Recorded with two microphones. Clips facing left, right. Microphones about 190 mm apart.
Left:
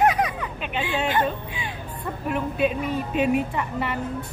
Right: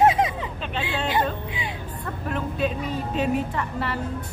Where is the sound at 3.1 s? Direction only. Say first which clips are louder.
Left 2 dB; 10° left (ahead or behind).